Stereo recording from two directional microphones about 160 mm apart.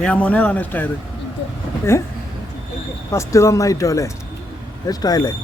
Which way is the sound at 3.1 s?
20° left (ahead or behind).